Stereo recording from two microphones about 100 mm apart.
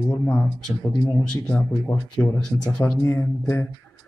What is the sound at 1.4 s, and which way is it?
Speech, 15° left (ahead or behind).